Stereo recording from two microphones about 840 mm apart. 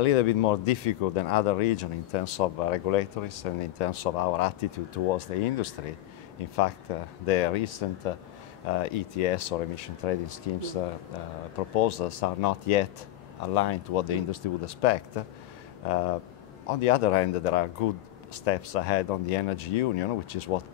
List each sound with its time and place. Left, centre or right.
0.0 s speech: left
6.9 s speech: left